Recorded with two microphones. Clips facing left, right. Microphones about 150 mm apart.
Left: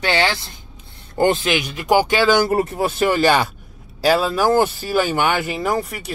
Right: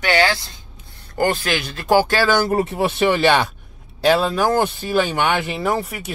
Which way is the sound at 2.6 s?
Centre (ahead or behind).